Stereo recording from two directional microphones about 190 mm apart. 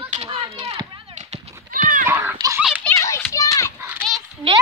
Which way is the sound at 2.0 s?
10° right (ahead or behind).